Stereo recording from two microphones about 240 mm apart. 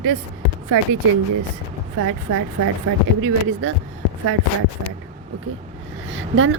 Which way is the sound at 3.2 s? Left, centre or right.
Right.